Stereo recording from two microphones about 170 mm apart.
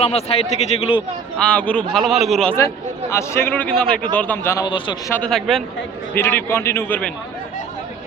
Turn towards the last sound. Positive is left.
turn(degrees=10)  # may be behind; listen again after turning